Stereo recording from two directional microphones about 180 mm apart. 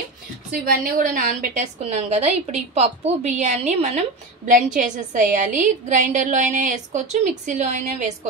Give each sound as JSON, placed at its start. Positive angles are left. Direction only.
{"t": 0.5, "sound": "a woman's voice", "side_deg": -50}